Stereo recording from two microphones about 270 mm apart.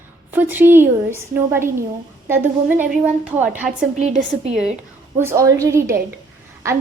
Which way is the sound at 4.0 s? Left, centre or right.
Right.